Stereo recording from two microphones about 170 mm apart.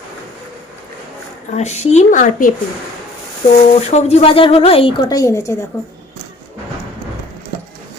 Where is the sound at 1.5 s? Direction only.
40° left (ahead or behind).